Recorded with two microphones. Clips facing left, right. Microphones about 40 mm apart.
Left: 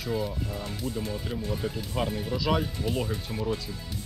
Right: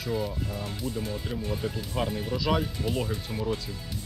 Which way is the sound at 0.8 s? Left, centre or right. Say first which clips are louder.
Even; right.